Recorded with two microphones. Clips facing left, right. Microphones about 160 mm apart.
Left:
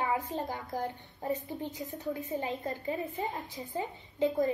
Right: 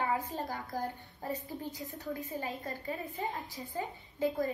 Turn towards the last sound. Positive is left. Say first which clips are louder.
# left 4 dB
turn(degrees=20)  # may be behind; listen again after turning